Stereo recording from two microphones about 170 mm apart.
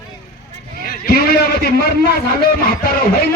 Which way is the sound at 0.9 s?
65° left (ahead or behind).